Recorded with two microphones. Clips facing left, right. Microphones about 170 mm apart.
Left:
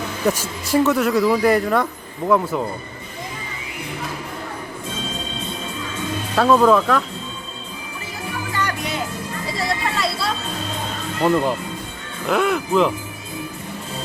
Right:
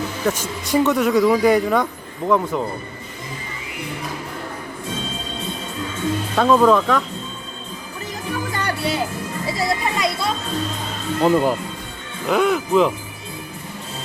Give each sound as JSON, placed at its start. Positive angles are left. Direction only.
{"t": 0.3, "sound": "speech", "side_deg": 5}
{"t": 6.3, "sound": "speech", "side_deg": 0}
{"t": 9.6, "sound": "a sound", "side_deg": -20}
{"t": 11.2, "sound": "speech", "side_deg": -10}